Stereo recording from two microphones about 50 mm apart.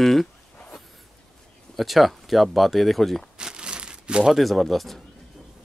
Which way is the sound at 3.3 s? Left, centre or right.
Centre.